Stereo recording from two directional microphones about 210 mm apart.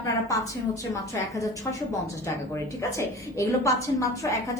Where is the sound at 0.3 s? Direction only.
15° left (ahead or behind).